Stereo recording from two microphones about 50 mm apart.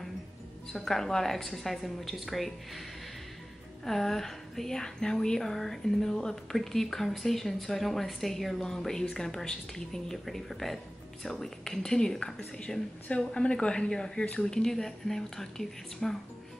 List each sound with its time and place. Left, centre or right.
0.7 s a woman's voice: centre
3.8 s speech: centre